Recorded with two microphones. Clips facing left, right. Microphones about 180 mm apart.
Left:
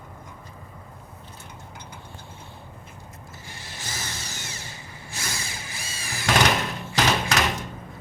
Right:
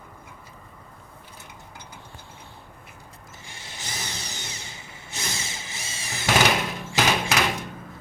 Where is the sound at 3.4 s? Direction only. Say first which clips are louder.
Even; 20° right (ahead or behind).